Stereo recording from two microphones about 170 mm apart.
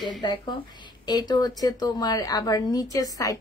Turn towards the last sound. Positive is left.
turn(degrees=20)  # may be behind; listen again after turning